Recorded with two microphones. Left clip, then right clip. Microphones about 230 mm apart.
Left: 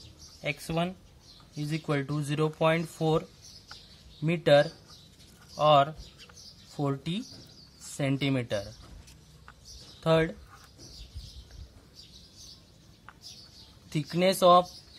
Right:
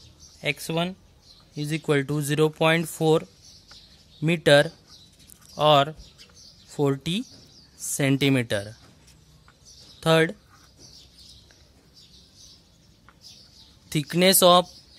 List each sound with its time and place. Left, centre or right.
0.4 s speech: right
9.9 s speech: right
13.8 s speech: right